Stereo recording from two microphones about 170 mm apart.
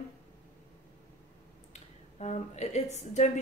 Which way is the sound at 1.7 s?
40° left (ahead or behind).